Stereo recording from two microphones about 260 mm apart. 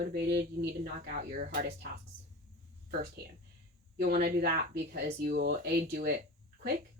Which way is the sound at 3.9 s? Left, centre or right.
Right.